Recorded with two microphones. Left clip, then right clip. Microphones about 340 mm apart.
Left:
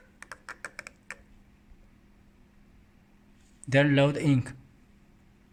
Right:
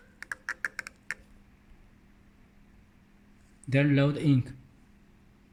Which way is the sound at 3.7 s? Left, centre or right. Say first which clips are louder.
Left 4 dB; centre.